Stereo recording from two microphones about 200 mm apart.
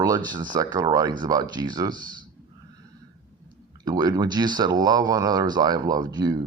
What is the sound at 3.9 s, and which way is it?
Speech, 20° right (ahead or behind).